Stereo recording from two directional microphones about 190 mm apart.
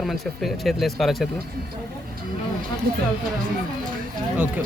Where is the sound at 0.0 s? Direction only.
Centre (ahead or behind).